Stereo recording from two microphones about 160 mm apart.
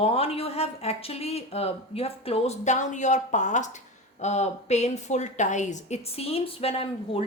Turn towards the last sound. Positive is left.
turn(degrees=35)  # may be behind; listen again after turning